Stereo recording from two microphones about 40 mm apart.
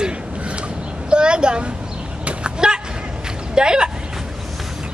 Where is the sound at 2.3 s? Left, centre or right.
Right.